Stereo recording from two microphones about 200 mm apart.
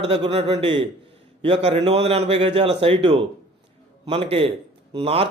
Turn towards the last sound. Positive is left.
turn(degrees=-30)  # may be behind; listen again after turning